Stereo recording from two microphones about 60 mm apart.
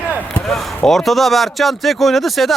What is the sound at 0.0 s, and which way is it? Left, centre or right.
Chop, left.